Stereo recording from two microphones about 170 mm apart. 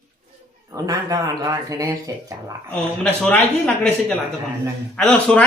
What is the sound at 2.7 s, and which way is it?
Speech, 5° left (ahead or behind).